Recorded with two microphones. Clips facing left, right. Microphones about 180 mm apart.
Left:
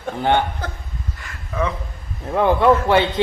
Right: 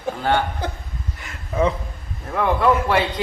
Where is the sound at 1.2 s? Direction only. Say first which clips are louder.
Right 3 dB; 25° right (ahead or behind).